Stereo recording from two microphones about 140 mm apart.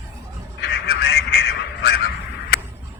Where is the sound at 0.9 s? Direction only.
90° left.